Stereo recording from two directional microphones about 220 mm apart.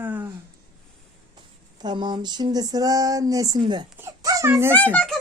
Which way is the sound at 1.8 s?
20° right (ahead or behind).